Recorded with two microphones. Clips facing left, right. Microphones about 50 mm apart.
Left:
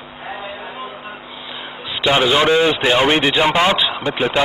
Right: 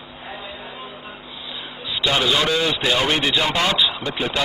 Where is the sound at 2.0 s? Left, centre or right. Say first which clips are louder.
Left 5 dB; left.